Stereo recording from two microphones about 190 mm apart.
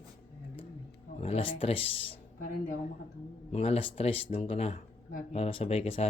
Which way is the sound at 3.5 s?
30° left (ahead or behind).